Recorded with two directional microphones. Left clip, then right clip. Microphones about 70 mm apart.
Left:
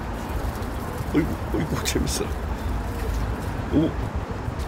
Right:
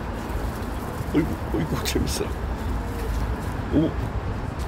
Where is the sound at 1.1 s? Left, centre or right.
Left.